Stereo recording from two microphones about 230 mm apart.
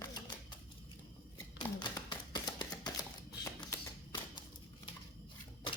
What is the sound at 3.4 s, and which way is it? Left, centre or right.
Typewriter, centre.